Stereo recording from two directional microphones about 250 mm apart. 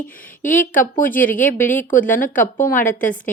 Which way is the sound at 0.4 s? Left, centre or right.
Left.